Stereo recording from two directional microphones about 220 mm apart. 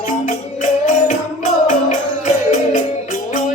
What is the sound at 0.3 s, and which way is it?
Music, 35° left (ahead or behind).